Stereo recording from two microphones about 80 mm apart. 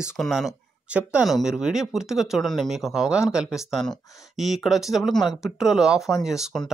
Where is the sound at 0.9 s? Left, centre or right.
Centre.